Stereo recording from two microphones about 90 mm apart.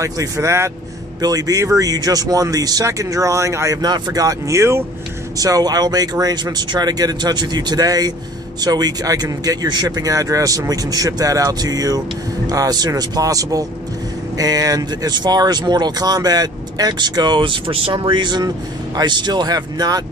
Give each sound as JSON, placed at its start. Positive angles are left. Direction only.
{"t": 0.0, "sound": "speech", "side_deg": -35}
{"t": 5.4, "sound": "speech", "side_deg": -45}